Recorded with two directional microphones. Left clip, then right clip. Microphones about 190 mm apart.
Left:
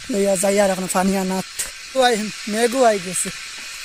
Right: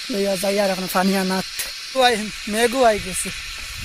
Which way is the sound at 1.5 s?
10° left (ahead or behind).